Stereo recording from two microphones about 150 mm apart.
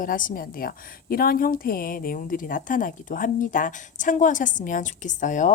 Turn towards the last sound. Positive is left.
turn(degrees=55)  # may be behind; listen again after turning